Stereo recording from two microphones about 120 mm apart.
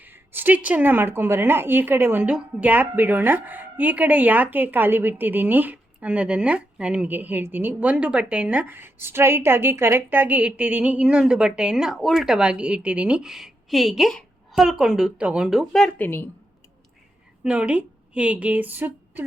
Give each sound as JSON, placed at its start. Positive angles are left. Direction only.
{"t": 0.0, "sound": "a woman's voice", "side_deg": -15}
{"t": 17.4, "sound": "a woman's voice", "side_deg": -10}